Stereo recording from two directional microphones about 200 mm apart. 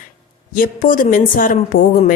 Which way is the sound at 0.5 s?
45° left (ahead or behind).